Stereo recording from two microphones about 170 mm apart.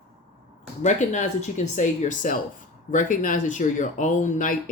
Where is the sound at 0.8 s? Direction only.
45° left (ahead or behind).